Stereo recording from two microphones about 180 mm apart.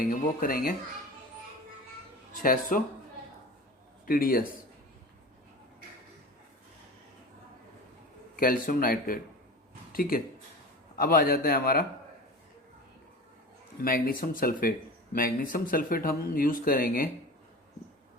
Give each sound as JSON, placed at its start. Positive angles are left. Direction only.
{"t": 0.0, "sound": "speech", "side_deg": 50}
{"t": 2.4, "sound": "speech", "side_deg": 50}
{"t": 4.0, "sound": "speech", "side_deg": 50}
{"t": 8.4, "sound": "a man's voice", "side_deg": 50}
{"t": 13.8, "sound": "speech", "side_deg": 50}